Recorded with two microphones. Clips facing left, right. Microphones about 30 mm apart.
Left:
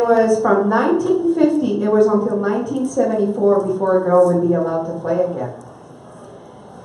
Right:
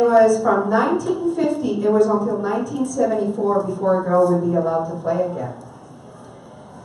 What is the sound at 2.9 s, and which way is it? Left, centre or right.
A woman's voice, centre.